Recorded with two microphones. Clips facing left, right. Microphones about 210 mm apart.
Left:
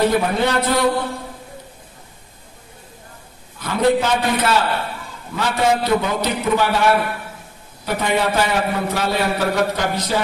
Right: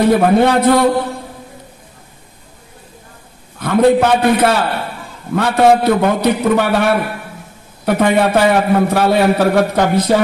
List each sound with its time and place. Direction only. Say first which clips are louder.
0.1 s a man's voice: right 7 dB; 55° right (ahead or behind)
3.5 s a man's voice: right 6 dB; 55° right (ahead or behind)